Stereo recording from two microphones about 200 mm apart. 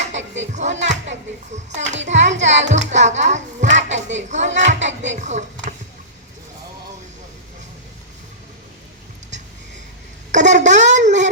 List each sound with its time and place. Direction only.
0.4 s a child's voice: 35° right (ahead or behind)
2.7 s music: 35° right (ahead or behind)
10.3 s a sound: 35° right (ahead or behind)